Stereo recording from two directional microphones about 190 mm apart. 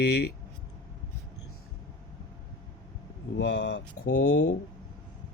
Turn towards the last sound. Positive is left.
turn(degrees=65)  # may be behind; listen again after turning